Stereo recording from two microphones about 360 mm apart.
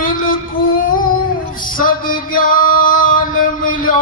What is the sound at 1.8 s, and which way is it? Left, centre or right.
Male singing, left.